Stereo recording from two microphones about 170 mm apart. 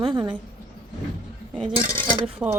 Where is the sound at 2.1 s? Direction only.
30° right (ahead or behind).